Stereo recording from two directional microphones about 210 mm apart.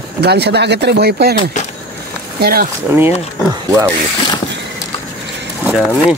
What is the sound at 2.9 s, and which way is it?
Speech, 10° right (ahead or behind).